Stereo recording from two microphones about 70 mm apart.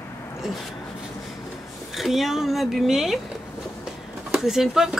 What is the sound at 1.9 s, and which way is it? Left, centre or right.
Speech, centre.